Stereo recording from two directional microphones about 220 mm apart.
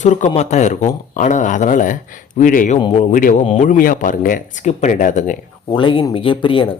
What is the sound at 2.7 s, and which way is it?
Speech, 20° left (ahead or behind).